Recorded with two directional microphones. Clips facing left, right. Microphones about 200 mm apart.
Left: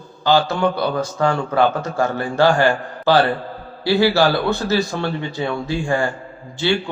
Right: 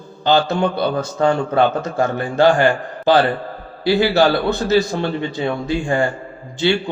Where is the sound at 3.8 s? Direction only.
20° right (ahead or behind).